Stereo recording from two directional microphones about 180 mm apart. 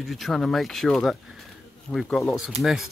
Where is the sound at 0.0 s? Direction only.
Centre (ahead or behind).